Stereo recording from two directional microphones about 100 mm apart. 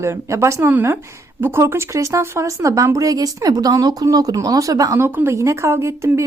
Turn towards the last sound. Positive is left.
turn(degrees=-30)  # may be behind; listen again after turning